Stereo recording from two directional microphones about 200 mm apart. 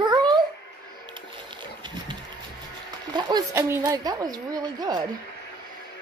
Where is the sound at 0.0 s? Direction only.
20° right (ahead or behind).